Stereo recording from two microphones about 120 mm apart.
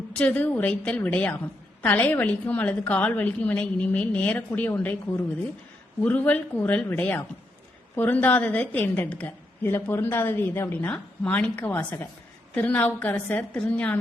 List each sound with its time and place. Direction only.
0.1 s a woman's voice: 10° left (ahead or behind)
6.0 s a woman's voice: 10° left (ahead or behind)